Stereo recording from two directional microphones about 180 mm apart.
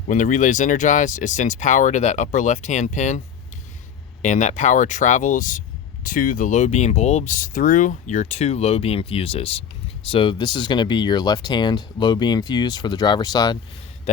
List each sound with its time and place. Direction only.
0.1 s speech: 45° left (ahead or behind)
4.2 s speech: 40° left (ahead or behind); by 13.6 s 20° left (ahead or behind)